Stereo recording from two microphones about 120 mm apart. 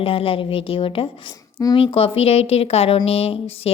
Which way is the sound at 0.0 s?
50° left (ahead or behind).